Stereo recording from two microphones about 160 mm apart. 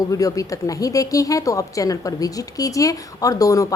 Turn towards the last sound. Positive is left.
turn(degrees=20)  # may be behind; listen again after turning